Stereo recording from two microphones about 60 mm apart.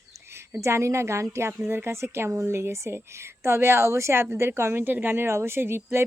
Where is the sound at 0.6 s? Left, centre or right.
Right.